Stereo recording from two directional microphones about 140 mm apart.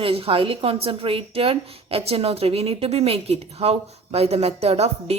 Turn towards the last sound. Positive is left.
turn(degrees=-50)  # may be behind; listen again after turning